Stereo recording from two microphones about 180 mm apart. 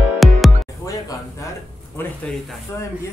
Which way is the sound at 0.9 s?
20° left (ahead or behind).